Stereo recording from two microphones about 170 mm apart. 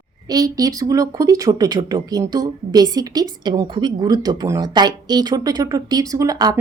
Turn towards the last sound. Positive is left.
turn(degrees=-20)  # may be behind; listen again after turning